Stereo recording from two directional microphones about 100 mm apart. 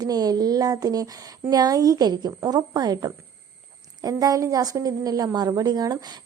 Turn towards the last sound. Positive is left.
turn(degrees=-40)  # may be behind; listen again after turning